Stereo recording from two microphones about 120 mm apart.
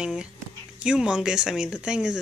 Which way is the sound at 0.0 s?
5° right (ahead or behind).